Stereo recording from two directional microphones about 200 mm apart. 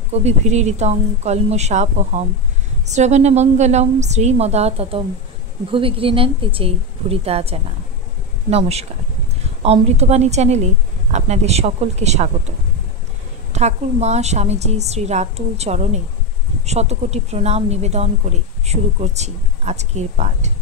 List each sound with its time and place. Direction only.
0.1 s a woman's voice: 35° right (ahead or behind)
13.5 s speech: 35° right (ahead or behind)